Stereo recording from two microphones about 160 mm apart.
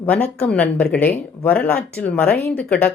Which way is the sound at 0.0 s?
10° left (ahead or behind).